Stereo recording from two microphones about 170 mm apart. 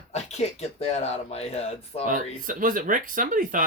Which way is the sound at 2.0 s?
50° right (ahead or behind).